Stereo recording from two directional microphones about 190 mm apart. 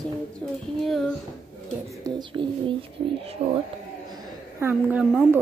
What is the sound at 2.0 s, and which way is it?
Speech, 25° right (ahead or behind).